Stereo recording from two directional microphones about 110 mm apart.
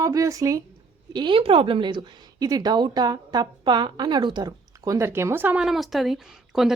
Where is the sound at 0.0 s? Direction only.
30° right (ahead or behind).